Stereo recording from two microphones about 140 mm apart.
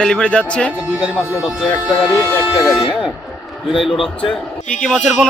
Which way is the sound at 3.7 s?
Centre (ahead or behind).